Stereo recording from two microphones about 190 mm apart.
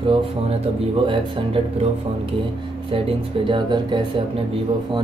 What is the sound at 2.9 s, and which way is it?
Speech, 25° right (ahead or behind).